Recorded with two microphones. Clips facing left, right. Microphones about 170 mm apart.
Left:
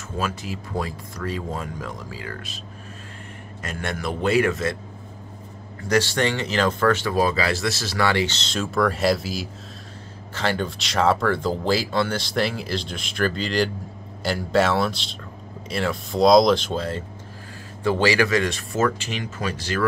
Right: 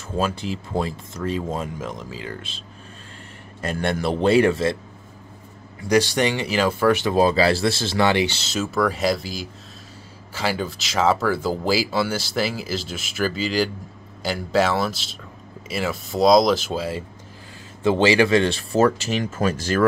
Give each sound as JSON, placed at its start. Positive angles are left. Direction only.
{"t": 0.2, "sound": "speech", "side_deg": -30}
{"t": 3.6, "sound": "speech", "side_deg": -30}
{"t": 5.8, "sound": "speech", "side_deg": -15}
{"t": 17.8, "sound": "speech", "side_deg": -20}